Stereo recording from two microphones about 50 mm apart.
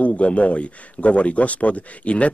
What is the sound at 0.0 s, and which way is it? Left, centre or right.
Speech, left.